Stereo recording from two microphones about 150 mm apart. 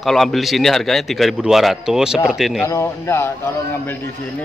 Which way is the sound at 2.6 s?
20° left (ahead or behind).